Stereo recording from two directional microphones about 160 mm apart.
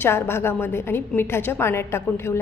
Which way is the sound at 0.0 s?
15° left (ahead or behind).